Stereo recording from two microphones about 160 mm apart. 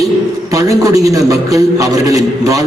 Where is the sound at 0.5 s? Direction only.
20° right (ahead or behind).